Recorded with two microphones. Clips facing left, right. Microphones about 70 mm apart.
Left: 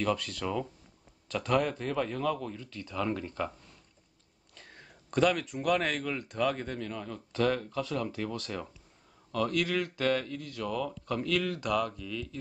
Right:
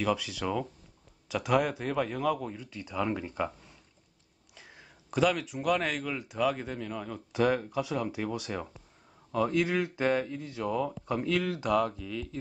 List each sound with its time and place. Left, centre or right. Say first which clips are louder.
0.0 s speech: right 1 dB; centre; by 12.4 s right